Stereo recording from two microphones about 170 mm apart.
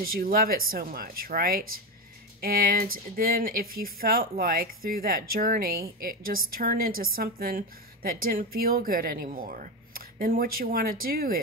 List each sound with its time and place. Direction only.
0.0 s speech: 60° right (ahead or behind)